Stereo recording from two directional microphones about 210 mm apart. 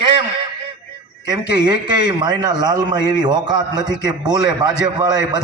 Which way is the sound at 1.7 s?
20° right (ahead or behind).